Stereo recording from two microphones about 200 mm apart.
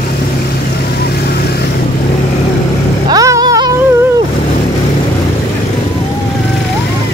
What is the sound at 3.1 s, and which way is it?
Vehicle, 20° right (ahead or behind).